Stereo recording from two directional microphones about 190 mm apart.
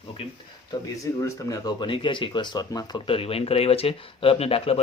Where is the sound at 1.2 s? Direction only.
20° left (ahead or behind).